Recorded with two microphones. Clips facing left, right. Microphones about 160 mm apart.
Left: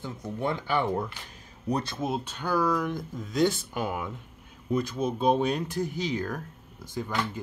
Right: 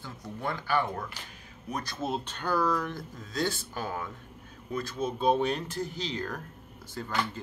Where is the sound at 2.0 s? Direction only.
10° left (ahead or behind).